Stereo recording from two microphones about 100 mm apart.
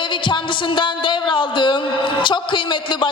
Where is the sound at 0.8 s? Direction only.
55° left (ahead or behind).